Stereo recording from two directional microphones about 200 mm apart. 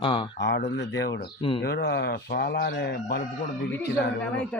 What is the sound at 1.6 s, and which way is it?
Speech, 55° left (ahead or behind).